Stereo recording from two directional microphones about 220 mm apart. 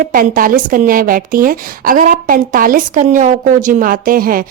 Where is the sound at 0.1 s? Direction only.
40° right (ahead or behind).